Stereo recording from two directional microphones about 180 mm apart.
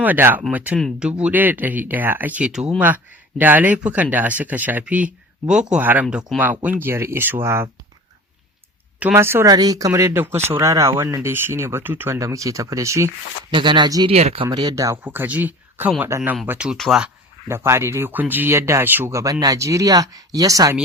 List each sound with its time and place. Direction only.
0.0 s speech: 10° right (ahead or behind)
9.0 s speech: 10° right (ahead or behind)
14.1 s speech: 35° right (ahead or behind)
14.4 s speech: 25° right (ahead or behind); by 17.1 s centre (ahead or behind)
17.5 s speech: 15° right (ahead or behind)